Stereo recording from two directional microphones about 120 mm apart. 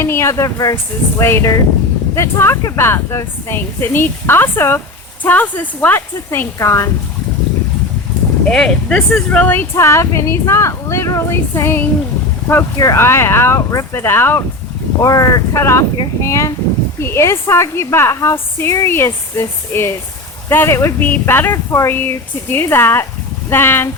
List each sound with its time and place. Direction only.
0.0 s speech: 20° left (ahead or behind)
8.4 s speech: 5° left (ahead or behind)
15.0 s speech: 30° left (ahead or behind)